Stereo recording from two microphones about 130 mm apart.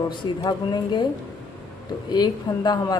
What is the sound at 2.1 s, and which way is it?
Speech, 30° left (ahead or behind).